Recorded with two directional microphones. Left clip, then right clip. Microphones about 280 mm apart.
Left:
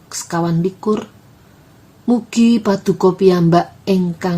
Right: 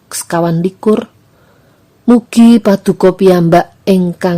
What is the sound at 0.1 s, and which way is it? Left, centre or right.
Speech, right.